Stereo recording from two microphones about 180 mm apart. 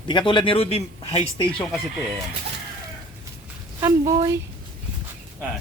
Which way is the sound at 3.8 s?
20° right (ahead or behind).